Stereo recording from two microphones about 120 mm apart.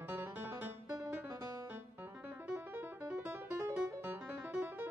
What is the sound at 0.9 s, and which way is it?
Music, 30° right (ahead or behind).